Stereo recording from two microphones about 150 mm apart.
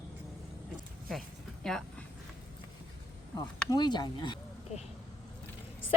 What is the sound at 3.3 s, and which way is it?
Speech, 25° left (ahead or behind).